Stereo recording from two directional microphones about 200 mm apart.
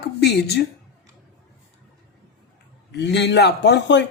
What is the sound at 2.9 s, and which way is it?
A woman's voice, 55° left (ahead or behind).